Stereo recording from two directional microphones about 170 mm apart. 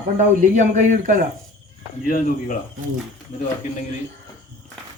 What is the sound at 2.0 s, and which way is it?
Speech, 55° left (ahead or behind).